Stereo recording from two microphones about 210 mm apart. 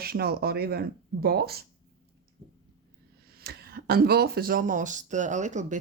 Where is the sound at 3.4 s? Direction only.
50° right (ahead or behind).